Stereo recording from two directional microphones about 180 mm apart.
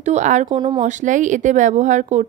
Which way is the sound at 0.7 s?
45° right (ahead or behind).